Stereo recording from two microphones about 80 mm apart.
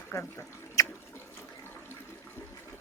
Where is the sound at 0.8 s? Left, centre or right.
Left.